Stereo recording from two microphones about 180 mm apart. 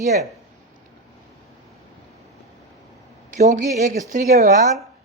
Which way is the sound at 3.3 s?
40° right (ahead or behind).